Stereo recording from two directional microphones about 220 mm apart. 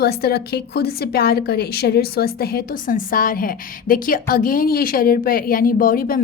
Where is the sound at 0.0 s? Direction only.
45° left (ahead or behind).